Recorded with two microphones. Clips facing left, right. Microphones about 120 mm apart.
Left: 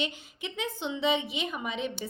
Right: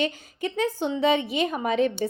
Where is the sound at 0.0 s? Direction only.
45° right (ahead or behind).